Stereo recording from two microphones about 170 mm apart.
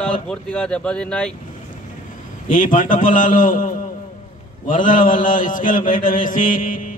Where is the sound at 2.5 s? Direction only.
50° left (ahead or behind).